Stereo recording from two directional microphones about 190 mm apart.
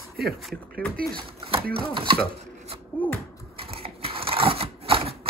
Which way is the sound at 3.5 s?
30° right (ahead or behind).